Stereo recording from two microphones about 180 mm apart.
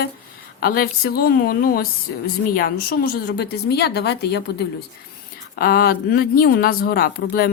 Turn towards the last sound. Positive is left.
turn(degrees=60)  # may be behind; listen again after turning